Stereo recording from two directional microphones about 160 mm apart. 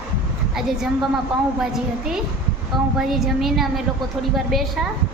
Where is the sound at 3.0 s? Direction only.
Centre (ahead or behind).